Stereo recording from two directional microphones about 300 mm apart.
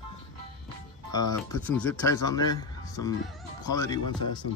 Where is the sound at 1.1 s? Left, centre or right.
Centre.